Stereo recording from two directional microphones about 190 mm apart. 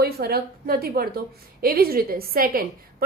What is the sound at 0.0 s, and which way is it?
A woman's voice, 55° right (ahead or behind).